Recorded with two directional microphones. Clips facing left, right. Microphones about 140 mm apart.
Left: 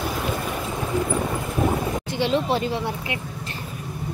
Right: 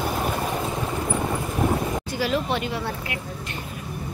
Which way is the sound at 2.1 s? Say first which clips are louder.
Left 4 dB; 25° left (ahead or behind).